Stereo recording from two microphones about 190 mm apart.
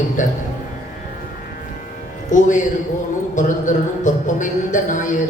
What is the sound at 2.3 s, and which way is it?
Speech, 40° left (ahead or behind).